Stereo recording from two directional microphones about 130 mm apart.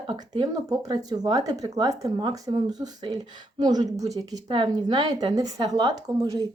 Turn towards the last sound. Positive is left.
turn(degrees=-30)  # may be behind; listen again after turning